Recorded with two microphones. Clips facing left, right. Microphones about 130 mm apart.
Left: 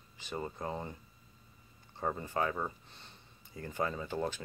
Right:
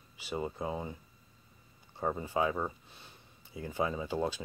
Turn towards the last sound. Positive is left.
turn(degrees=-15)  # may be behind; listen again after turning